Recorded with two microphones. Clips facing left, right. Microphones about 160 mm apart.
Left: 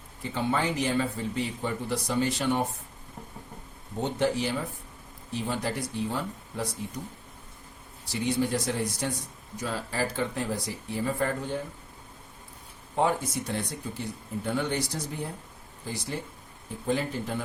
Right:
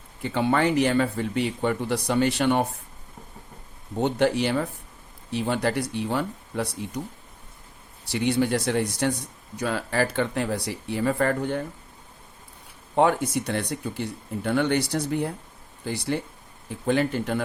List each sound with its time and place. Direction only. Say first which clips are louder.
0.2 s speech: right 6 dB; 70° right (ahead or behind)
4.0 s speech: right 5 dB; 70° right (ahead or behind)
8.0 s speech: right 4 dB; 70° right (ahead or behind)
13.0 s speech: right 5 dB; 70° right (ahead or behind)